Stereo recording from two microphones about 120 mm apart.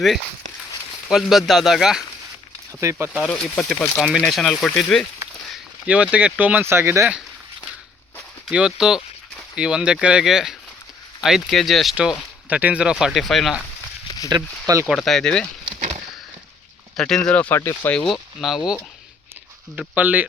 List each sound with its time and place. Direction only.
1.0 s speech: centre (ahead or behind)
2.8 s speech: 20° right (ahead or behind)
3.2 s speech: 10° left (ahead or behind)
5.8 s speech: 10° right (ahead or behind)
8.4 s speech: 5° right (ahead or behind)
12.5 s speech: 10° right (ahead or behind)
14.3 s speech: 35° right (ahead or behind)
14.8 s speech: centre (ahead or behind)
17.0 s speech: 5° left (ahead or behind)
17.6 s speech: 20° left (ahead or behind)
17.9 s speech: 5° left (ahead or behind)
19.9 s speech: 10° right (ahead or behind)